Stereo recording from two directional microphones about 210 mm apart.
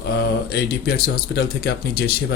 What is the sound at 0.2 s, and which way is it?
Speech, 50° left (ahead or behind).